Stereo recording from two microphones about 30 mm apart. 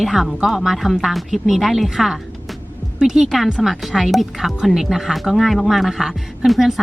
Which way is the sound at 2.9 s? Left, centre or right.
Centre.